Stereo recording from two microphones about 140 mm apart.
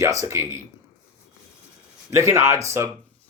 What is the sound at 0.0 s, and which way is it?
Speech, 20° right (ahead or behind).